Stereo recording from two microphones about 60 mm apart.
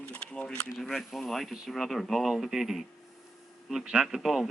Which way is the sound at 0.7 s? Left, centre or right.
Centre.